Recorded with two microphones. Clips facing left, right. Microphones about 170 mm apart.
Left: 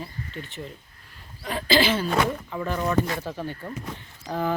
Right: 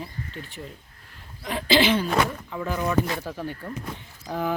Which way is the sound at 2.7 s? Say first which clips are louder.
Even; centre (ahead or behind).